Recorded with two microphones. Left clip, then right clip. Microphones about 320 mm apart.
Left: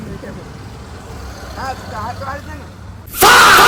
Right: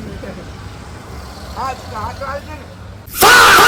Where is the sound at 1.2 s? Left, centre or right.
Left.